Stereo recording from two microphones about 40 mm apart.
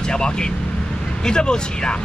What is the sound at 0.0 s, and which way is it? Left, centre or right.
Speech, left.